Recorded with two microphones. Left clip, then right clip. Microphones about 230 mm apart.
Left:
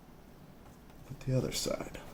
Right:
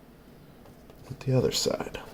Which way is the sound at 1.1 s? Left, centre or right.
Right.